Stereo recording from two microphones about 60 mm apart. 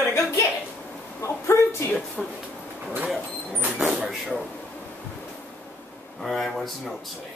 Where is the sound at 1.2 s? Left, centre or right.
Left.